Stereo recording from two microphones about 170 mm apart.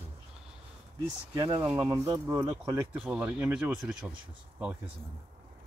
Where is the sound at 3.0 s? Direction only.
10° right (ahead or behind).